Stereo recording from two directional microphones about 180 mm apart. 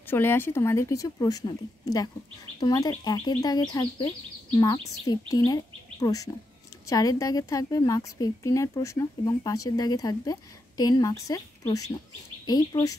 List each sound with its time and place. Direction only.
0.1 s speech: 10° left (ahead or behind)
2.6 s a woman's voice: 20° left (ahead or behind)